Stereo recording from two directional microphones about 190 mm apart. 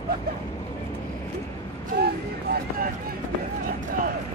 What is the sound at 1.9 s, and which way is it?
Speech, 55° right (ahead or behind).